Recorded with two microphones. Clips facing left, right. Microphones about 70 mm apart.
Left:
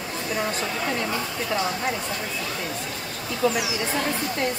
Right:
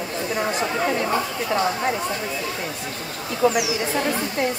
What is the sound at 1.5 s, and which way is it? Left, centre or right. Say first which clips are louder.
Speech: right 4 dB; right.